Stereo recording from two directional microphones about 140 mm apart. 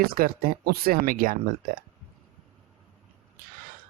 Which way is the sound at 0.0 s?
90° right.